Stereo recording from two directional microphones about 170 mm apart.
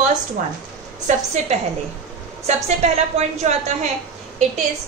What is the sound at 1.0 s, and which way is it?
A woman's voice, 40° right (ahead or behind).